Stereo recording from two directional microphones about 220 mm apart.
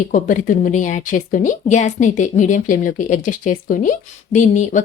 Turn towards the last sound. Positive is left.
turn(degrees=35)  # may be behind; listen again after turning